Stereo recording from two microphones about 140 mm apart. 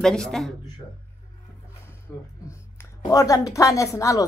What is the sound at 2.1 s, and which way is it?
A woman's voice, 15° left (ahead or behind).